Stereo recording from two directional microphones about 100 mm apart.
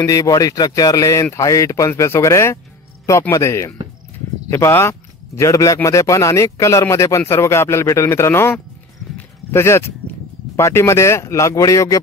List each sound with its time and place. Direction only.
0.0 s speech: 35° left (ahead or behind)